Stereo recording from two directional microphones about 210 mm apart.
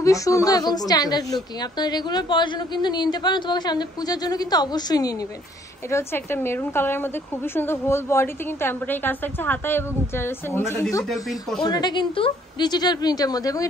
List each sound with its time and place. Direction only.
0.0 s a woman's voice: 15° left (ahead or behind)